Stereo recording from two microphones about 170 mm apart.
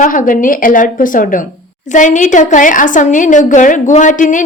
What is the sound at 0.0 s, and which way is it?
A woman's voice, 50° left (ahead or behind).